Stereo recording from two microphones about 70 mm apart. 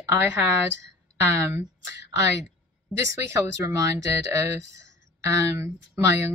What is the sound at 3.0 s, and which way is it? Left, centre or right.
Speech, right.